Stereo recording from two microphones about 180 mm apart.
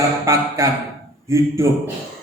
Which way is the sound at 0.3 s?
15° right (ahead or behind).